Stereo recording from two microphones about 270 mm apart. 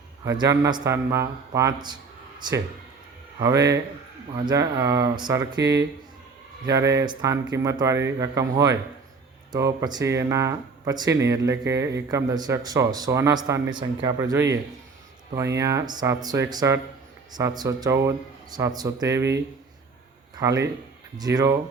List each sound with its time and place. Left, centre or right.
0.3 s speech: centre
6.7 s speech: centre
20.3 s speech: centre